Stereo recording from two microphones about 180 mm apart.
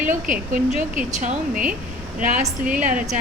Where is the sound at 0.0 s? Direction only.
45° right (ahead or behind).